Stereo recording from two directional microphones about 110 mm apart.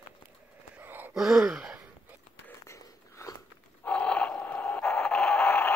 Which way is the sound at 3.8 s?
10° left (ahead or behind).